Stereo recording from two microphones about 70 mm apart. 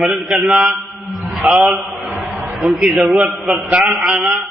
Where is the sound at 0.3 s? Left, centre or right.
Centre.